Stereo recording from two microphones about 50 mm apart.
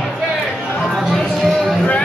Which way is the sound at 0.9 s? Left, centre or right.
Centre.